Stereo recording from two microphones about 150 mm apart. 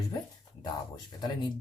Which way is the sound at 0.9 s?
30° left (ahead or behind).